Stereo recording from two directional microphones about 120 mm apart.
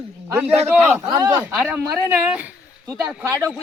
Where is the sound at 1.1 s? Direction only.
30° right (ahead or behind).